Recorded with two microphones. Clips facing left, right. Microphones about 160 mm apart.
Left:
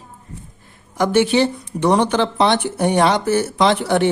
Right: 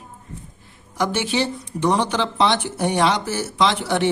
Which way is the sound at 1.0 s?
55° left (ahead or behind).